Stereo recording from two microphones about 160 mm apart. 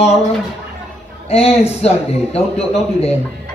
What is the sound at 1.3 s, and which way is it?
Speech, 40° left (ahead or behind).